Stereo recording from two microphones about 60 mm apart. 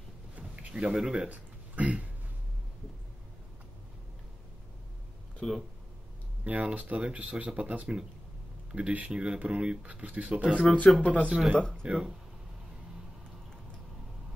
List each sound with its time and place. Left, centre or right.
0.4 s a sound: centre
0.9 s speech: centre
1.3 s speech: right
5.4 s speech: centre
6.4 s speech: right
10.7 s speech: centre
11.2 s speech: centre
11.5 s speech: centre
11.8 s speech: centre